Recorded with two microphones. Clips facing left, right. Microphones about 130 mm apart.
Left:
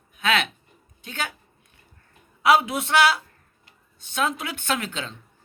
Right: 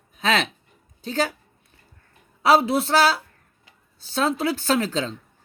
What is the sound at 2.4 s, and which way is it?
Speech, 30° right (ahead or behind).